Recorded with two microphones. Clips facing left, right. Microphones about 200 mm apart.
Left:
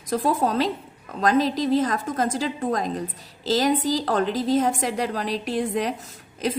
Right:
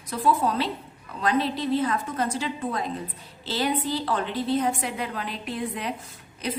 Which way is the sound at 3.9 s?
45° left (ahead or behind).